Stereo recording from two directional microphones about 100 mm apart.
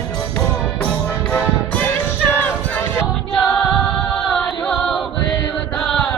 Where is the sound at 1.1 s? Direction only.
20° left (ahead or behind).